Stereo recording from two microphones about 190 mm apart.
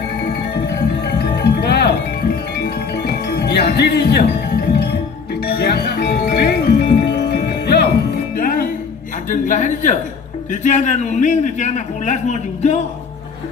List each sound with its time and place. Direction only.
0.5 s music: 60° left (ahead or behind)
9.3 s a man's voice: 40° left (ahead or behind)